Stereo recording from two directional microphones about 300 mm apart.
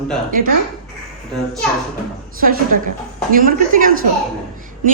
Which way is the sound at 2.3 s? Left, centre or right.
Right.